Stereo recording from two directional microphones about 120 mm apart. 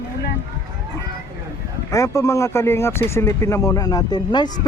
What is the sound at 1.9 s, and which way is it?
Speech, 25° left (ahead or behind).